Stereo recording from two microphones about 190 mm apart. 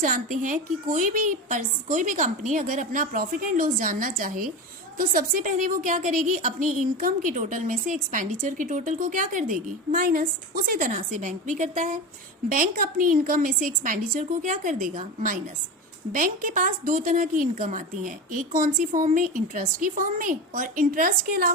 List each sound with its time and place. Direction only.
0.0 s a woman's voice: 45° right (ahead or behind)